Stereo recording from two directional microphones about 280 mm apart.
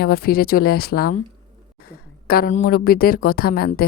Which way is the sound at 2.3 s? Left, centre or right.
Left.